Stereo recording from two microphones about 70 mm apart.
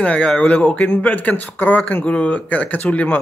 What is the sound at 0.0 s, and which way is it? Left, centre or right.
Speech, centre.